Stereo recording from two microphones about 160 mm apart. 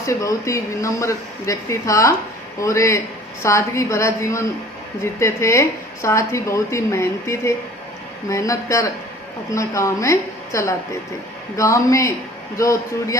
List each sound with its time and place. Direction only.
0.0 s a woman's voice: 20° left (ahead or behind)